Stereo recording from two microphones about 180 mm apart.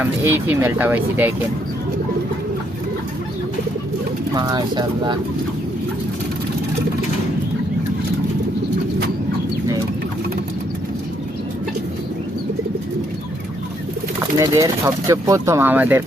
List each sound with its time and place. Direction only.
0.0 s speech: 10° right (ahead or behind)
4.4 s speech: 25° right (ahead or behind)
14.2 s speech: 20° right (ahead or behind)